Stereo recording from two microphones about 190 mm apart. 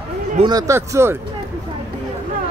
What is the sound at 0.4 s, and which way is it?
Speech, 20° right (ahead or behind).